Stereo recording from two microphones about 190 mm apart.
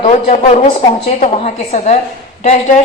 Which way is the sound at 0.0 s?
35° left (ahead or behind).